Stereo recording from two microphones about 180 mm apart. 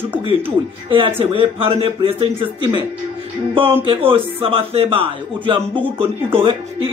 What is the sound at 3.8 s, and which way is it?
A man's voice, 30° right (ahead or behind).